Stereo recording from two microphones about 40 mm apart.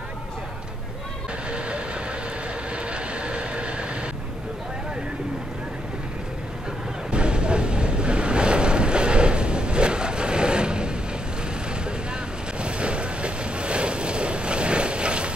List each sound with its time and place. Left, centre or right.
2.7 s vehicle: right
7.1 s waves: right
12.5 s vehicle: right